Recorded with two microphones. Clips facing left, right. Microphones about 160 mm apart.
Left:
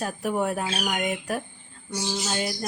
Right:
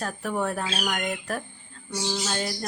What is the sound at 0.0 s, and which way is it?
Speech, 15° left (ahead or behind).